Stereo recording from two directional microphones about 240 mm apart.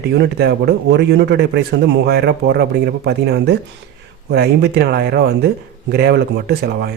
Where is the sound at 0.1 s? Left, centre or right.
Right.